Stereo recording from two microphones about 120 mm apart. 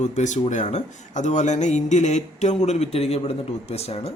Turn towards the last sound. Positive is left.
turn(degrees=60)  # may be behind; listen again after turning